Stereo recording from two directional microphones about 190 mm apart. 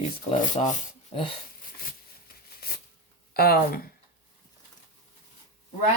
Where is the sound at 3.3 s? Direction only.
55° left (ahead or behind).